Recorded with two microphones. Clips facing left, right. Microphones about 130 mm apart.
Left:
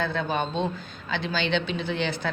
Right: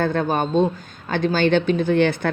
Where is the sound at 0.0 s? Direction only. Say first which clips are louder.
Right 6 dB; 50° right (ahead or behind).